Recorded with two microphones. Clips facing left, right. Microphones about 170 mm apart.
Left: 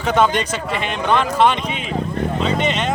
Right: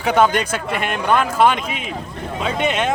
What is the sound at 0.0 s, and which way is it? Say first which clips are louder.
Speech: right 1 dB; 10° right (ahead or behind).